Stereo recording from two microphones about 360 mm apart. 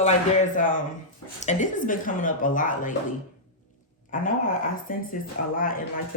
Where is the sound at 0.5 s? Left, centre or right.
Left.